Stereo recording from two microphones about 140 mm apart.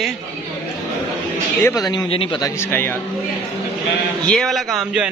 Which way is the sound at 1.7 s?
30° left (ahead or behind).